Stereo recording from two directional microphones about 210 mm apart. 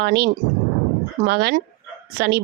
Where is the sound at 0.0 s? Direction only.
50° right (ahead or behind).